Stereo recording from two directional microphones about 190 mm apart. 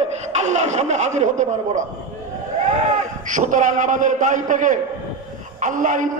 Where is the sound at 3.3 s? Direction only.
40° right (ahead or behind).